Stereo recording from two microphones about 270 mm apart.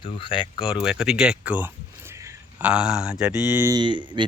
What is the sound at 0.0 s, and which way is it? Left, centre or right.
Speech, centre.